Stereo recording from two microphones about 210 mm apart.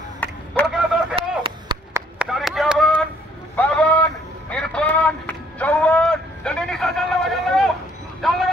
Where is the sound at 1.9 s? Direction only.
5° right (ahead or behind).